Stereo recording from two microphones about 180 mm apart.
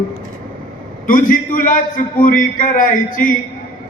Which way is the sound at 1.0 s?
50° left (ahead or behind).